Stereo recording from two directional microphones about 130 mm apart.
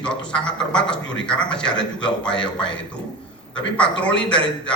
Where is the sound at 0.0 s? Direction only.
5° left (ahead or behind).